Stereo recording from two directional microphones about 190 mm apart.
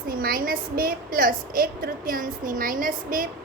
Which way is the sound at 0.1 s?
50° right (ahead or behind).